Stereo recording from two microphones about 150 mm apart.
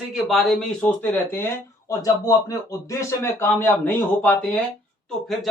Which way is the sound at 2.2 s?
25° left (ahead or behind).